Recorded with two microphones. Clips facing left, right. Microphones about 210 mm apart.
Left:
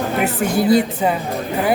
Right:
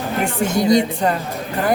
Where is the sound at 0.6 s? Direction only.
5° left (ahead or behind).